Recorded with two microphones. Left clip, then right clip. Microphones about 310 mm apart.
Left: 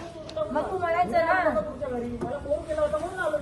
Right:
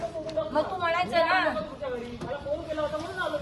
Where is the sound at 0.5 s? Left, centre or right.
Right.